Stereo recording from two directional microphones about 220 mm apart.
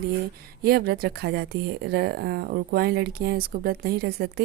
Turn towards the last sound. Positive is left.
turn(degrees=-45)  # may be behind; listen again after turning